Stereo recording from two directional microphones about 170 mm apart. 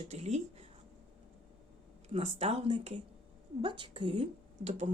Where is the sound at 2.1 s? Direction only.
35° right (ahead or behind).